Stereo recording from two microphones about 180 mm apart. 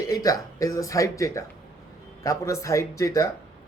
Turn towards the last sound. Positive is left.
turn(degrees=20)  # may be behind; listen again after turning